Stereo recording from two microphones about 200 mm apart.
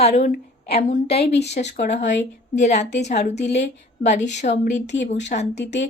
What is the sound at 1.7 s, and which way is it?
Speech, 55° left (ahead or behind).